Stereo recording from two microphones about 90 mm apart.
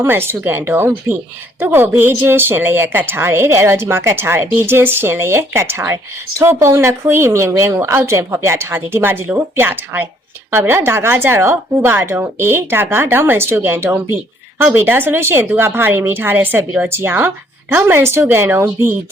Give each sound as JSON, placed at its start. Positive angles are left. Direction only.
{"t": 0.0, "sound": "a woman's voice", "side_deg": -25}